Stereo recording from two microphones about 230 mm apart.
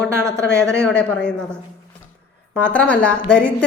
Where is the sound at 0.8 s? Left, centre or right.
Centre.